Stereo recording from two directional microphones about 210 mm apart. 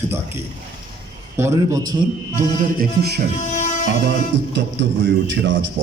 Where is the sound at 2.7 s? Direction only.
50° right (ahead or behind).